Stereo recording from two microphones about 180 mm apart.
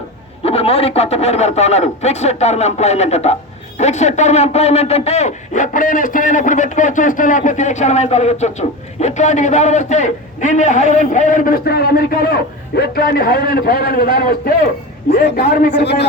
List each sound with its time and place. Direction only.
0.4 s speech: 35° left (ahead or behind); by 14.5 s 55° left (ahead or behind)
15.4 s speech: 40° left (ahead or behind)
15.7 s a man's voice: 70° left (ahead or behind)